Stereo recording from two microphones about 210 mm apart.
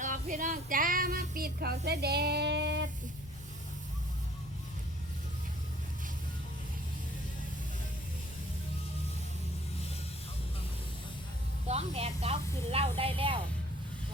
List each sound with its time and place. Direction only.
0.0 s child singing: 40° right (ahead or behind); by 2.8 s 55° right (ahead or behind)
11.7 s speech: 30° right (ahead or behind)